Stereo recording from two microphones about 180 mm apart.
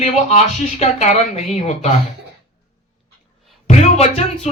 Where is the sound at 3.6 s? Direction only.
35° left (ahead or behind).